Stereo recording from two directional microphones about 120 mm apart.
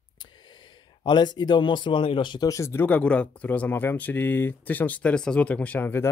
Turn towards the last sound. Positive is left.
turn(degrees=20)  # may be behind; listen again after turning